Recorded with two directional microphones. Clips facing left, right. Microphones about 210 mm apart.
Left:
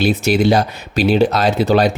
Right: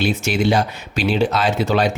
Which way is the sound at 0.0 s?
40° left (ahead or behind).